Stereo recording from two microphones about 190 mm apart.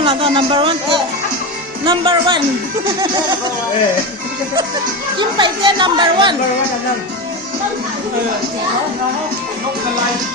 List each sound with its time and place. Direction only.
0.0 s speech: 30° right (ahead or behind)
5.1 s speech: 25° right (ahead or behind)